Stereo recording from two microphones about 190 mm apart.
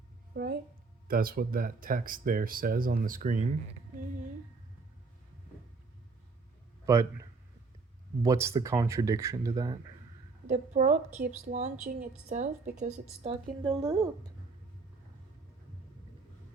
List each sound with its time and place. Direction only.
0.4 s a woman's voice: 60° right (ahead or behind)
1.0 s speech: 50° right (ahead or behind)
6.8 s a man's voice: 15° right (ahead or behind)
10.4 s a woman's voice: 40° right (ahead or behind); by 14.3 s 20° right (ahead or behind)